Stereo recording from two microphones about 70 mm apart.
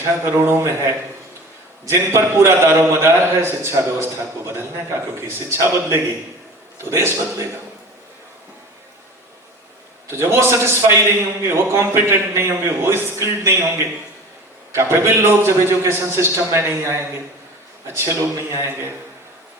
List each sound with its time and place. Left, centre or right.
0.0 s a man's voice: right
10.1 s a man's voice: right